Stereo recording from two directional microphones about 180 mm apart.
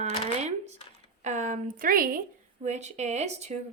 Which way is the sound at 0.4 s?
40° right (ahead or behind).